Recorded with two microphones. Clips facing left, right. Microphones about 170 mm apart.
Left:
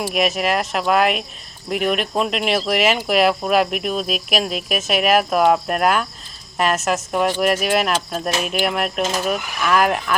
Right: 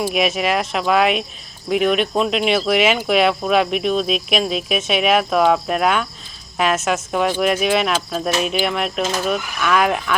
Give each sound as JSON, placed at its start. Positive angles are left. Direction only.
{"t": 0.0, "sound": "speech", "side_deg": 0}